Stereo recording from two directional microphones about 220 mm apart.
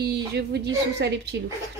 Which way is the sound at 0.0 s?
50° right (ahead or behind).